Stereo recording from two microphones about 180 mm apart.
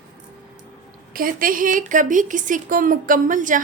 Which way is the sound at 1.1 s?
50° right (ahead or behind).